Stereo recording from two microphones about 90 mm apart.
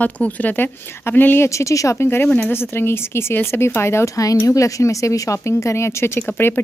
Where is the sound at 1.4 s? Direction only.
35° left (ahead or behind).